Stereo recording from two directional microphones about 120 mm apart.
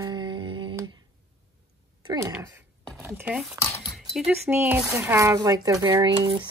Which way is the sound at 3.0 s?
15° right (ahead or behind).